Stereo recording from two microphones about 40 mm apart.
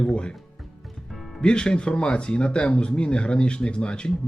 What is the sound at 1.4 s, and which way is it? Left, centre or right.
Speech, left.